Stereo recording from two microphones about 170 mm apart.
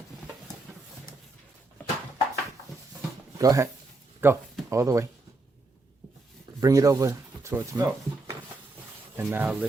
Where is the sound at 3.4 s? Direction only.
20° right (ahead or behind).